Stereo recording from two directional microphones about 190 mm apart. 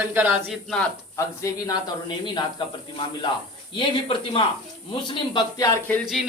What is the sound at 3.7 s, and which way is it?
Speech, 30° left (ahead or behind).